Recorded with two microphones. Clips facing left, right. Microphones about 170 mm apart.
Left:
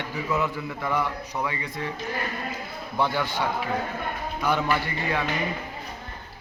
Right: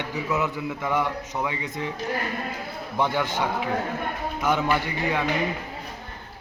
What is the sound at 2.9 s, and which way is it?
A man's voice, 20° right (ahead or behind).